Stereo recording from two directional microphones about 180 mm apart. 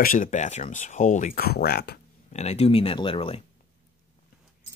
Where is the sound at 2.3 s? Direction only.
35° left (ahead or behind).